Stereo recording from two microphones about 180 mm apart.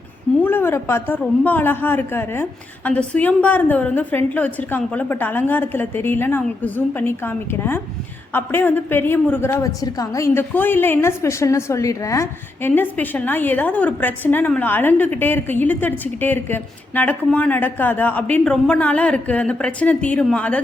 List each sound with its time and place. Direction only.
0.4 s a woman's voice: 10° left (ahead or behind)